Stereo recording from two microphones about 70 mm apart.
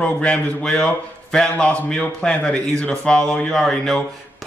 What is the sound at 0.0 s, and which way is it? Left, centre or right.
A man's voice, centre.